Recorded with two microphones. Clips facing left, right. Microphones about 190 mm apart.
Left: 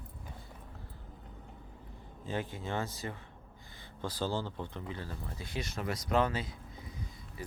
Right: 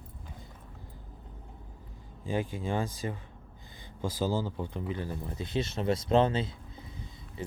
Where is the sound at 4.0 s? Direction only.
10° right (ahead or behind).